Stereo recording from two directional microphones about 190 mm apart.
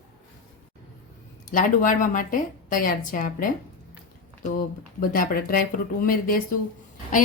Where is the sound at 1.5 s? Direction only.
45° left (ahead or behind).